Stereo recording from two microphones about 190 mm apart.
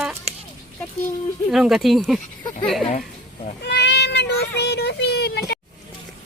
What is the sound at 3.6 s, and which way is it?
Speech, 65° left (ahead or behind).